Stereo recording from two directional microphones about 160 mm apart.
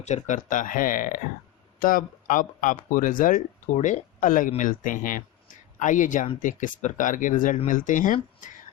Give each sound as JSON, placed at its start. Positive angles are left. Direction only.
{"t": 0.0, "sound": "speech", "side_deg": 45}